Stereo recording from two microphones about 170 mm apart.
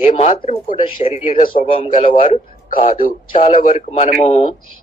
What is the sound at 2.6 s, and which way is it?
Speech, 55° left (ahead or behind).